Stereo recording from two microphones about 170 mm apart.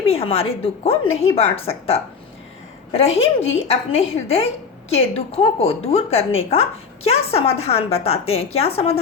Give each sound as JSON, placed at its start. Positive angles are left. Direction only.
{"t": 0.0, "sound": "speech", "side_deg": 35}